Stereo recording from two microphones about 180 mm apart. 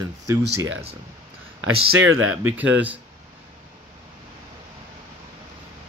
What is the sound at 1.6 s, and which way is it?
Speech, 90° right.